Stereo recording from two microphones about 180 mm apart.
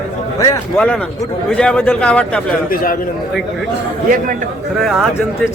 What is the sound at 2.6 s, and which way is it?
Speech, 50° left (ahead or behind).